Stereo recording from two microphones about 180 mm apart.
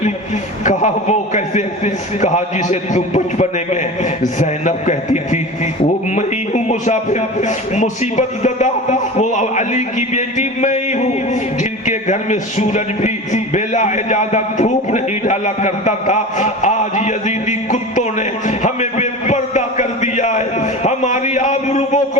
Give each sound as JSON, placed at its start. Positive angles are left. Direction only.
{"t": 0.6, "sound": "a man's voice", "side_deg": 40}